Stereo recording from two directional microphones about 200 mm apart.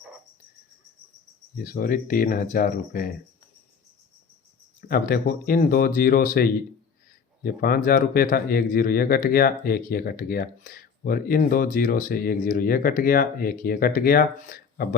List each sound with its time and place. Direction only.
1.6 s speech: 45° left (ahead or behind)
4.9 s speech: 50° left (ahead or behind)